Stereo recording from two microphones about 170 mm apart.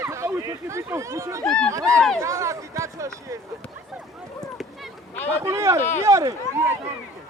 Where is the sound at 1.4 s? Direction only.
5° left (ahead or behind).